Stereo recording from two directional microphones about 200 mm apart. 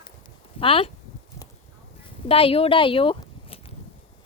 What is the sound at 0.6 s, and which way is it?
Speech, 30° left (ahead or behind).